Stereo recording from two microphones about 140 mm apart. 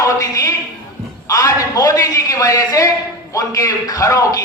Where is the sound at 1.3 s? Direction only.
25° left (ahead or behind).